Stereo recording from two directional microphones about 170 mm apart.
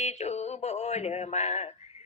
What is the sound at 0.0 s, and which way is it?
Male singing, 40° left (ahead or behind).